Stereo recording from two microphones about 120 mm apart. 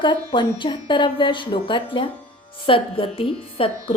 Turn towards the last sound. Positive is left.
turn(degrees=50)  # may be behind; listen again after turning